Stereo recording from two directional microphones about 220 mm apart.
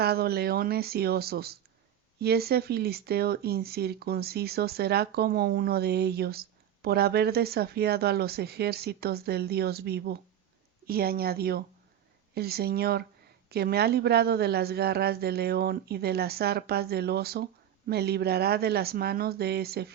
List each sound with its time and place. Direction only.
0.0 s speech: 45° right (ahead or behind)